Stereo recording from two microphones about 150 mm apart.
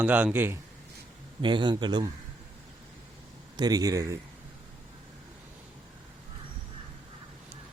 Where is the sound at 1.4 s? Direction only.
30° right (ahead or behind).